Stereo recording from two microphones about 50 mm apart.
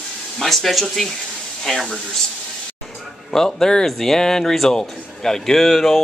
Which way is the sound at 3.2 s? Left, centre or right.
Centre.